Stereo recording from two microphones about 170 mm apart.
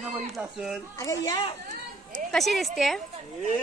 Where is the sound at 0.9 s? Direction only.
20° left (ahead or behind).